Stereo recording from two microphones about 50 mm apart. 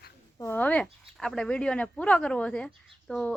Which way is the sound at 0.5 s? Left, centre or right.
Left.